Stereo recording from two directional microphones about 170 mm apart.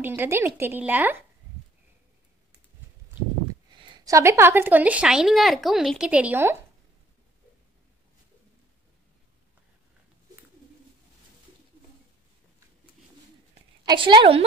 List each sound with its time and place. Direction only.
0.0 s a woman's voice: 10° right (ahead or behind)
3.7 s a woman's voice: 25° right (ahead or behind)
13.8 s a woman's voice: 30° right (ahead or behind)